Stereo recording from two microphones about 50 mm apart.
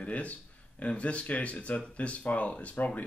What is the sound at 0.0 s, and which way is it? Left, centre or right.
Speech, left.